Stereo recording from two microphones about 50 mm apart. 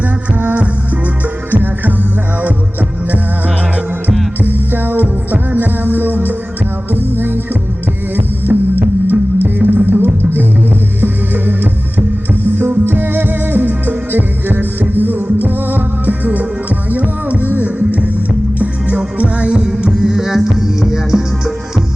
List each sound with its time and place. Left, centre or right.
0.3 s music: right
4.4 s music: right
19.9 s music: centre